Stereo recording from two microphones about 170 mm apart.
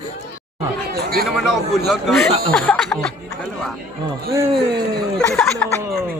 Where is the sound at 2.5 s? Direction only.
5° left (ahead or behind).